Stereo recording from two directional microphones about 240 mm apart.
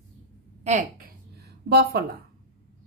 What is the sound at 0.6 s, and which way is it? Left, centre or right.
Speech, right.